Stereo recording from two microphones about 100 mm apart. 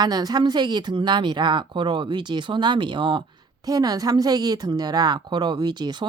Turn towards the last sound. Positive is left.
turn(degrees=-45)  # may be behind; listen again after turning